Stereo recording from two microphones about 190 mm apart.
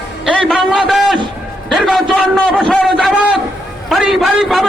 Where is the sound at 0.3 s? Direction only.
Centre (ahead or behind).